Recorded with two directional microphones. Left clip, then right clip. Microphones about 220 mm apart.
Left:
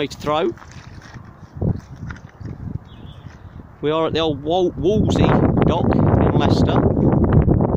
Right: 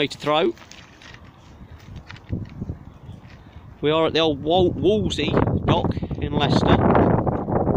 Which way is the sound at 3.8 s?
Centre (ahead or behind).